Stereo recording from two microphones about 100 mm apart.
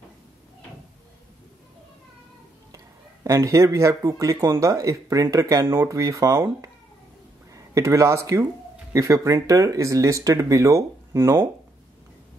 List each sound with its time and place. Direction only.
3.3 s speech: 30° right (ahead or behind)